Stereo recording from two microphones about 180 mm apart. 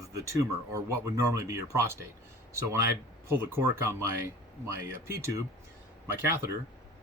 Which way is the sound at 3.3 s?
15° right (ahead or behind).